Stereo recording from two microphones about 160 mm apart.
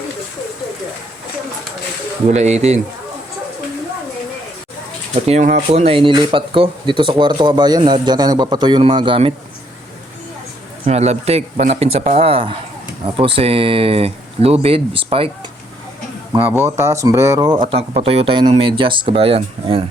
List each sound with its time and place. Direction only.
2.3 s speech: 45° right (ahead or behind)
5.2 s speech: 45° right (ahead or behind)
10.8 s speech: 45° right (ahead or behind)
16.5 s speech: 15° right (ahead or behind); by 19.8 s 35° right (ahead or behind)